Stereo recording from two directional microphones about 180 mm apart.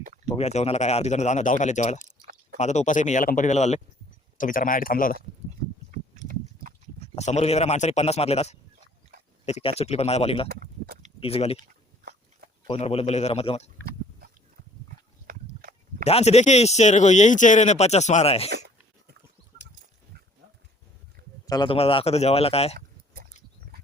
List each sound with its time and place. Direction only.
0.3 s speech: 35° left (ahead or behind)
5.9 s a sound: 45° right (ahead or behind)
7.0 s speech: 40° left (ahead or behind)
10.5 s speech: 60° right (ahead or behind)
11.2 s speech: 35° left (ahead or behind)
12.6 s speech: 35° left (ahead or behind)
15.3 s a sound: 55° right (ahead or behind)
16.0 s speech: 35° left (ahead or behind)
21.4 s speech: 20° left (ahead or behind)